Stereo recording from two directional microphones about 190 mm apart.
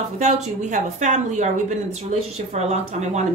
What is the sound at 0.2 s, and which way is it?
A woman's voice, 40° right (ahead or behind).